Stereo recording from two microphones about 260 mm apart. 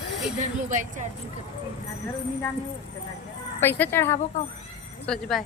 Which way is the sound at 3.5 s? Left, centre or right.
Centre.